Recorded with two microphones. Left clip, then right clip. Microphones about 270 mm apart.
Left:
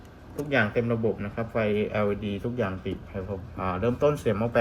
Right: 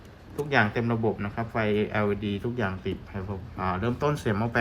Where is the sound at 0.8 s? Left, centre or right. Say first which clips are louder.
Even; centre.